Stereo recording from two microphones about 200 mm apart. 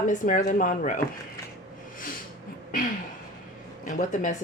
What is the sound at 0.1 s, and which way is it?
Speech, 40° left (ahead or behind).